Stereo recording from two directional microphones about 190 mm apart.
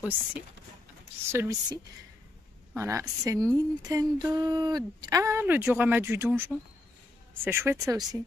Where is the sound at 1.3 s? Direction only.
15° right (ahead or behind).